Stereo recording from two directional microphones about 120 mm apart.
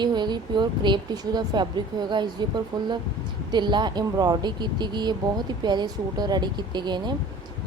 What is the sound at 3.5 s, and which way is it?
Speech, 40° right (ahead or behind).